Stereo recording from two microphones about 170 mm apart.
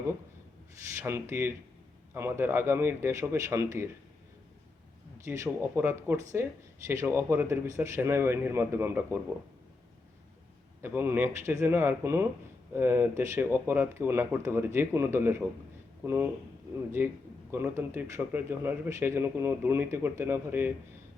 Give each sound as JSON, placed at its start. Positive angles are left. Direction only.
{"t": 0.8, "sound": "speech", "side_deg": -15}
{"t": 5.1, "sound": "speech", "side_deg": -15}
{"t": 10.8, "sound": "speech", "side_deg": -15}